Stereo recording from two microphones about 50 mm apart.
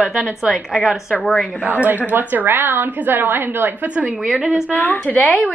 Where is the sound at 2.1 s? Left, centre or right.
Right.